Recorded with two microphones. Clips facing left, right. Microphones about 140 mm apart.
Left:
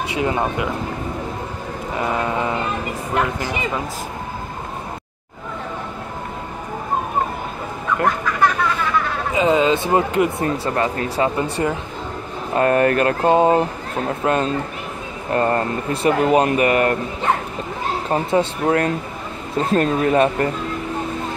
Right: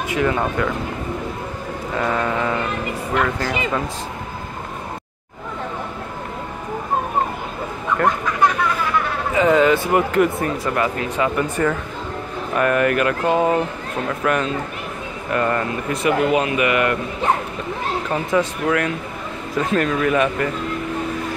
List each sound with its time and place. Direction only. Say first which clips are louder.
0.2 s speech: right 1 dB; 20° left (ahead or behind)
2.0 s a sound: even; 15° left (ahead or behind)
3.3 s speech: right 1 dB; 15° left (ahead or behind)
9.3 s speech: right 1 dB; 15° left (ahead or behind); by 11.4 s 30° left (ahead or behind)
12.5 s speech: left 2 dB; 35° left (ahead or behind)
18.0 s speech: left 2 dB; 30° left (ahead or behind)